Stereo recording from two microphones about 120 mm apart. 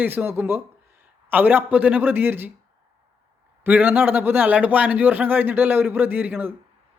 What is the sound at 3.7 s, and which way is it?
Speech, 15° right (ahead or behind).